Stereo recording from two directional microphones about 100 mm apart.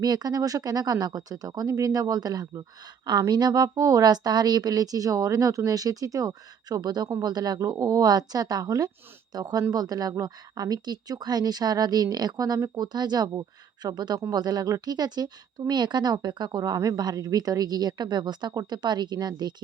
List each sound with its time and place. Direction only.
0.0 s a woman's voice: 40° right (ahead or behind)